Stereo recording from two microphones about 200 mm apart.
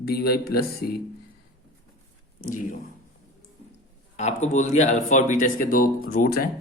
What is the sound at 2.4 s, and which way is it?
Speech, 40° left (ahead or behind).